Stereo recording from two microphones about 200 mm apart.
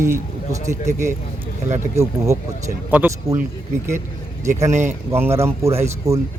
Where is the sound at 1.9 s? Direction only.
15° right (ahead or behind).